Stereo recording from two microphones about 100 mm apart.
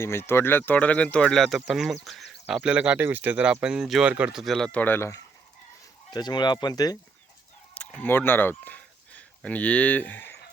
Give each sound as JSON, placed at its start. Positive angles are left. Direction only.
{"t": 0.0, "sound": "speech", "side_deg": 25}
{"t": 2.0, "sound": "a sound", "side_deg": 0}
{"t": 2.6, "sound": "speech", "side_deg": -10}
{"t": 4.7, "sound": "speech", "side_deg": 20}
{"t": 6.1, "sound": "speech", "side_deg": 45}
{"t": 7.7, "sound": "speech", "side_deg": 15}